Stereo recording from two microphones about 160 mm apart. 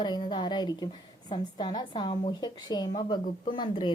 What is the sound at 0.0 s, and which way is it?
A woman's voice, 30° left (ahead or behind).